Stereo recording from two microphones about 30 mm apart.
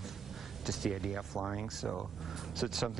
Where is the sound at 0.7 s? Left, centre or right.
Centre.